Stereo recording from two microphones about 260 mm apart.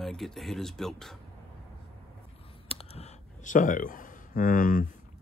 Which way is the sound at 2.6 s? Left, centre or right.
Left.